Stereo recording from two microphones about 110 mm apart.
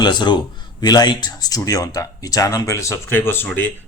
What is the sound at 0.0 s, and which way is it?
A man's voice, 45° left (ahead or behind).